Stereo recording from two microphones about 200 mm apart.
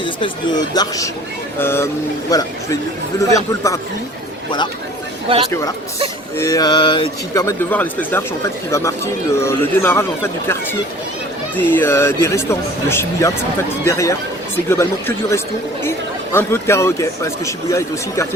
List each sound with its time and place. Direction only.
0.7 s speech: 15° left (ahead or behind)
5.3 s speech: 25° right (ahead or behind)
6.3 s speech: 15° left (ahead or behind)
9.4 s speech: 15° left (ahead or behind)
11.5 s speech: 10° left (ahead or behind)